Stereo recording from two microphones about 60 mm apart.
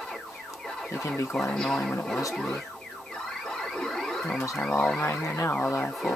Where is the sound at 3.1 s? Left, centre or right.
Centre.